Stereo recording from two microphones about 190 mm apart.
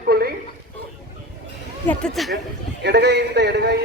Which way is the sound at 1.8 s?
5° left (ahead or behind).